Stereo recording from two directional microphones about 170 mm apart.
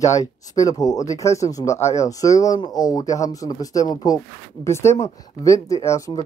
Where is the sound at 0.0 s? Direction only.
20° left (ahead or behind).